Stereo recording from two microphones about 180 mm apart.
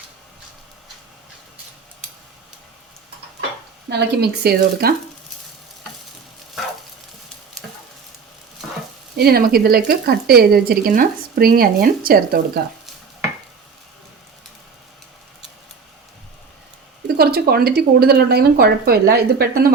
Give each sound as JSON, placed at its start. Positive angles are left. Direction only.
{"t": 3.8, "sound": "speech", "side_deg": -65}
{"t": 9.1, "sound": "speech", "side_deg": -60}
{"t": 17.2, "sound": "speech", "side_deg": -60}